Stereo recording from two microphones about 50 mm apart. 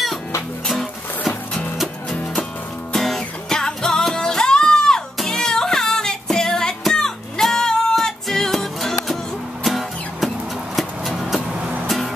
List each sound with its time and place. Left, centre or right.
0.7 s music: centre
2.9 s music: centre